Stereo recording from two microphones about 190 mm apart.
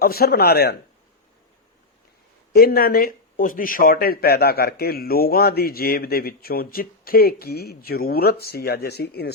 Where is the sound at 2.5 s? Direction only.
50° left (ahead or behind).